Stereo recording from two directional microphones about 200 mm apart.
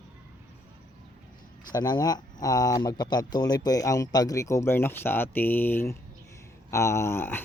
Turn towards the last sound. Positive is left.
turn(degrees=10)  # may be behind; listen again after turning